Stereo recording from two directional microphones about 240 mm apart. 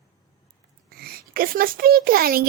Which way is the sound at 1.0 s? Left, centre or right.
Right.